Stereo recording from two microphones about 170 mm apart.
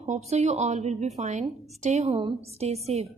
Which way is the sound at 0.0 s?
40° right (ahead or behind).